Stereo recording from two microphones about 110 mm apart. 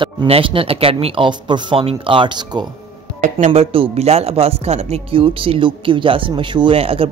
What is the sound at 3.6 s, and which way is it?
Speech, 70° right (ahead or behind).